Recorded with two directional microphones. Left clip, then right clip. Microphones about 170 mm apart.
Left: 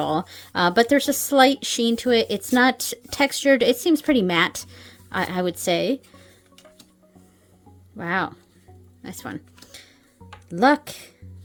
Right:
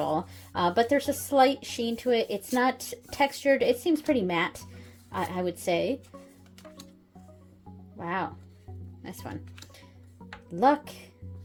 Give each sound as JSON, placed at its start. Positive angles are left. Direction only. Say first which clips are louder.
{"t": 0.0, "sound": "speech", "louder": "left 5 dB", "side_deg": 45}
{"t": 7.9, "sound": "speech", "louder": "left 7 dB", "side_deg": 45}
{"t": 9.0, "sound": "speech", "louder": "left 6 dB", "side_deg": 35}
{"t": 10.5, "sound": "speech", "louder": "left 5 dB", "side_deg": 45}